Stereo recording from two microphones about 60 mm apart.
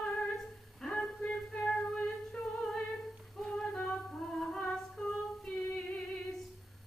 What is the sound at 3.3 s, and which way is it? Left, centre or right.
Music, centre.